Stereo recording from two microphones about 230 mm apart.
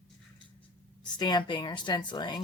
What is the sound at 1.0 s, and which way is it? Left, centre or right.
Speech, centre.